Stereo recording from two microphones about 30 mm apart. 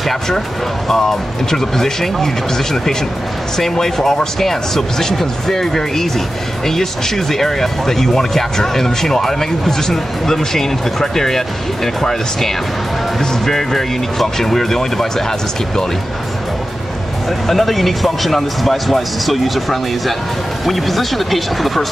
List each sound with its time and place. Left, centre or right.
0.8 s speech: centre
17.5 s speech: centre